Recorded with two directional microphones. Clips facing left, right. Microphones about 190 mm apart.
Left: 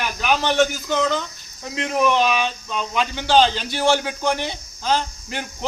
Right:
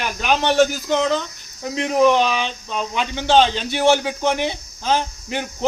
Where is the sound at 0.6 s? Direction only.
25° right (ahead or behind).